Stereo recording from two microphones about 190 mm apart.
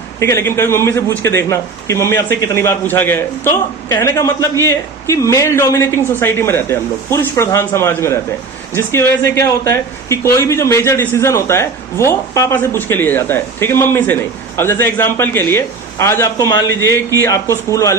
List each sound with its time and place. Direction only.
0.2 s speech: 15° left (ahead or behind)